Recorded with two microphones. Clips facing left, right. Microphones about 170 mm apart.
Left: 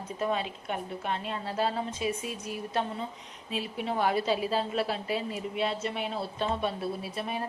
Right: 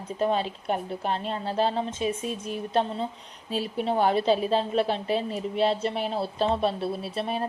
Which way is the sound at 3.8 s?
30° right (ahead or behind).